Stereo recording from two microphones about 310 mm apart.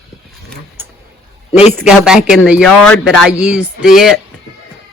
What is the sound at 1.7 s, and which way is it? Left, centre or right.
Speech, centre.